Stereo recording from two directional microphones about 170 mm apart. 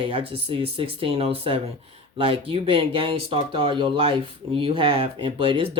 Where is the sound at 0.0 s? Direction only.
30° right (ahead or behind).